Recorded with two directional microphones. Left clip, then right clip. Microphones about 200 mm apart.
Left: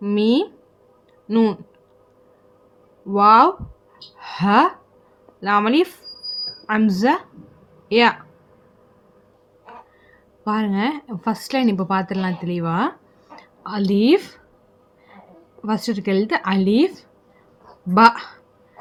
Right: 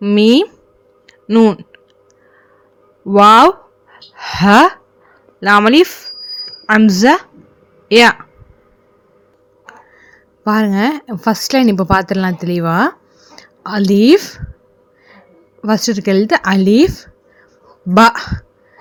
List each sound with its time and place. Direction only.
0.0 s a woman's voice: 35° right (ahead or behind)
1.0 s a sound: 30° right (ahead or behind)
3.1 s a woman's voice: 40° right (ahead or behind)
10.0 s a woman's voice: 40° right (ahead or behind)
15.6 s a woman's voice: 35° right (ahead or behind)